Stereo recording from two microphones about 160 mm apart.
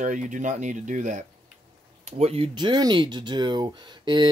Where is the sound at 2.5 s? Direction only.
25° right (ahead or behind).